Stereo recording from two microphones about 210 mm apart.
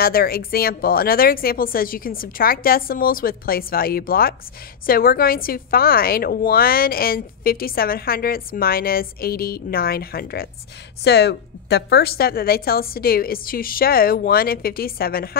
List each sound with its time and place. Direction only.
0.0 s a woman's voice: 45° left (ahead or behind)